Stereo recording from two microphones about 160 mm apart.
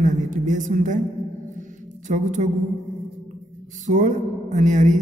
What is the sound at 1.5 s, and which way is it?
Music, 50° right (ahead or behind).